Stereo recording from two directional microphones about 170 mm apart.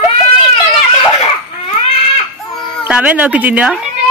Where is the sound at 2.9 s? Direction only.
10° right (ahead or behind).